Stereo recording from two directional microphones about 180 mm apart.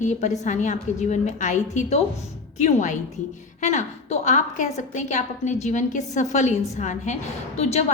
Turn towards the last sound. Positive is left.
turn(degrees=35)  # may be behind; listen again after turning